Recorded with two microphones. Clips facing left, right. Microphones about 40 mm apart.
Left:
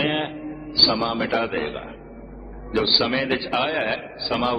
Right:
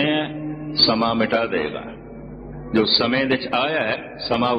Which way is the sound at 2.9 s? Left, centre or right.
Centre.